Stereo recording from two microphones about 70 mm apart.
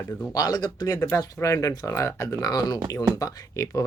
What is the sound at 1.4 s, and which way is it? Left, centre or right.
Speech, left.